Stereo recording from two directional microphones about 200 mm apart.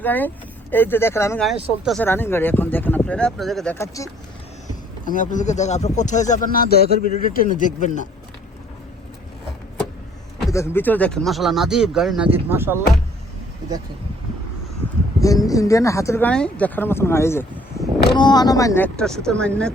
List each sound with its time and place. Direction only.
0.0 s speech: 10° left (ahead or behind)
1.5 s speech: centre (ahead or behind)
2.0 s speech: 10° left (ahead or behind)
3.8 s speech: 15° left (ahead or behind)
5.0 s speech: 40° left (ahead or behind)
10.5 s speech: 15° left (ahead or behind); by 12.8 s 10° right (ahead or behind)
15.2 s speech: 15° left (ahead or behind)